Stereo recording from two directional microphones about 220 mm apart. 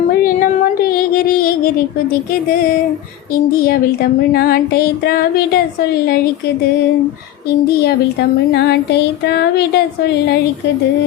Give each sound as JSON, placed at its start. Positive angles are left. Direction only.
{"t": 0.1, "sound": "music", "side_deg": 40}
{"t": 4.3, "sound": "speech", "side_deg": 45}
{"t": 7.8, "sound": "speech", "side_deg": 45}